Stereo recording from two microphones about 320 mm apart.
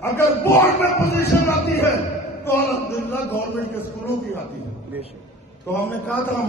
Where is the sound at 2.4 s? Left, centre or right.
Centre.